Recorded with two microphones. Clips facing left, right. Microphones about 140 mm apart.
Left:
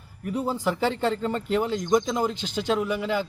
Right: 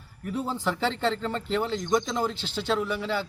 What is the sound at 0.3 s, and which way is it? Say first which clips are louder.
Speech: left 3 dB; 10° left (ahead or behind).